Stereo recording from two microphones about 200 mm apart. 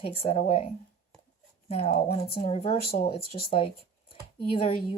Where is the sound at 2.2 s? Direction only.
30° left (ahead or behind).